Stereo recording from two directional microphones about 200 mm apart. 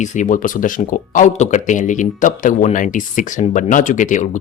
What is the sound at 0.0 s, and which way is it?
Speech, 40° left (ahead or behind).